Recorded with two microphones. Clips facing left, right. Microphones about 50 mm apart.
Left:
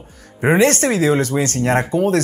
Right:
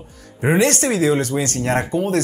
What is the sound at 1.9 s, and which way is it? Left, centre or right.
Speech, left.